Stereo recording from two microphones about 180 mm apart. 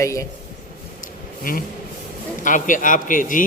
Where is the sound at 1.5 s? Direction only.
50° left (ahead or behind).